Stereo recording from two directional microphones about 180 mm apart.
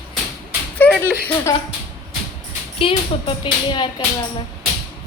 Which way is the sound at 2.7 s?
30° left (ahead or behind).